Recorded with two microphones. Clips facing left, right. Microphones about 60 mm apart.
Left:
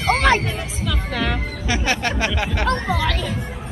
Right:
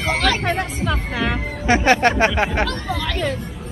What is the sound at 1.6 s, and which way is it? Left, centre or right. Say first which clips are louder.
Speech: right 8 dB; right.